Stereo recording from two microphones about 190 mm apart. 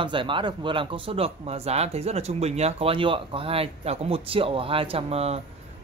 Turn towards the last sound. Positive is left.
turn(degrees=-30)  # may be behind; listen again after turning